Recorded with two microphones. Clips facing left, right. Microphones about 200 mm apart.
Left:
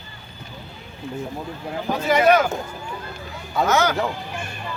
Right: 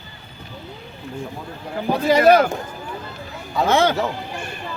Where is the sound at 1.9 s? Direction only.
35° right (ahead or behind).